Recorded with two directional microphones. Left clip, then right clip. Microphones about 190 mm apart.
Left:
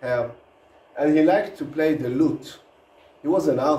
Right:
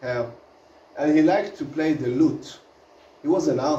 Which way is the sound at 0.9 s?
20° left (ahead or behind).